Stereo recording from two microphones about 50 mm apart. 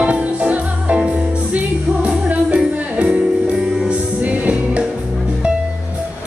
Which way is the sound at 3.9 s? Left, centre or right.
Right.